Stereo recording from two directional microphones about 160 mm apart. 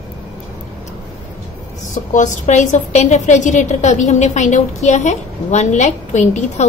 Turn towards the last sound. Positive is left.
turn(degrees=45)  # may be behind; listen again after turning